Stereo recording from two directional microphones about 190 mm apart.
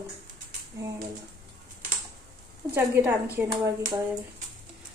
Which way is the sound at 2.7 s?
15° right (ahead or behind).